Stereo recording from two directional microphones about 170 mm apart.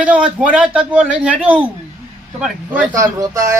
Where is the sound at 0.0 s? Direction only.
5° right (ahead or behind).